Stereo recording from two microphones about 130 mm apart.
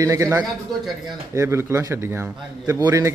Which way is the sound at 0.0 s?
25° right (ahead or behind).